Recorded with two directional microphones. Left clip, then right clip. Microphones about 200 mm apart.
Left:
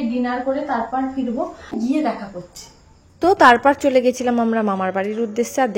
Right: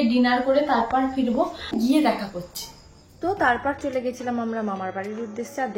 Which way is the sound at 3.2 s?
45° left (ahead or behind).